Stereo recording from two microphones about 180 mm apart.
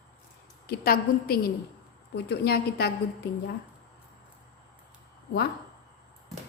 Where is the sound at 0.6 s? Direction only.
60° left (ahead or behind).